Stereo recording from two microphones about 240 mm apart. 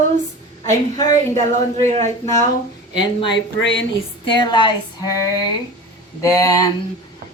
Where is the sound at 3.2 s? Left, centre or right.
Left.